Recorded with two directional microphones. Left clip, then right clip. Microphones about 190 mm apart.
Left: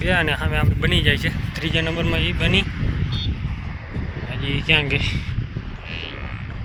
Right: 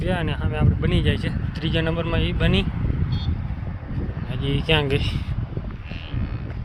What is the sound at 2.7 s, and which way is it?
Vehicle, 65° right (ahead or behind).